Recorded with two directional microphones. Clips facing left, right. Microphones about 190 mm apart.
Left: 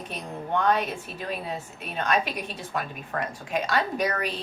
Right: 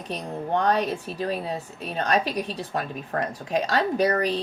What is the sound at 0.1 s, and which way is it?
A woman's voice, 35° right (ahead or behind).